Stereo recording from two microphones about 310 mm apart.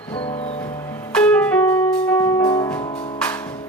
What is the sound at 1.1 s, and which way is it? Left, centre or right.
Music, centre.